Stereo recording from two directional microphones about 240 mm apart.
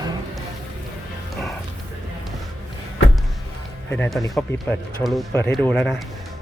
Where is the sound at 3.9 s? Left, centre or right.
Centre.